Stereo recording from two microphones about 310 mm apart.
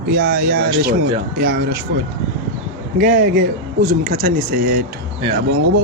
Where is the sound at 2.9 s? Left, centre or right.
Right.